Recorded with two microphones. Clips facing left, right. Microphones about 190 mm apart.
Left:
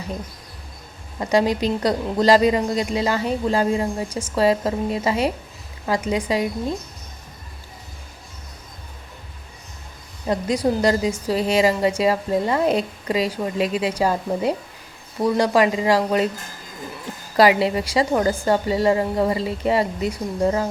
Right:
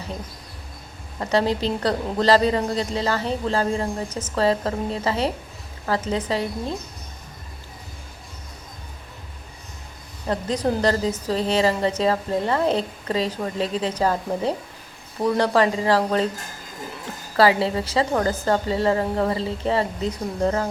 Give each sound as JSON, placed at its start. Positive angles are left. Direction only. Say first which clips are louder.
{"t": 1.2, "sound": "a woman's voice", "louder": "left 2 dB", "side_deg": 15}
{"t": 10.2, "sound": "a woman's voice", "louder": "left 2 dB", "side_deg": 10}
{"t": 17.3, "sound": "a woman's voice", "louder": "left 2 dB", "side_deg": 15}